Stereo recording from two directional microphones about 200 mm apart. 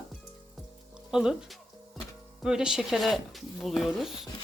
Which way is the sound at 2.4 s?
5° right (ahead or behind).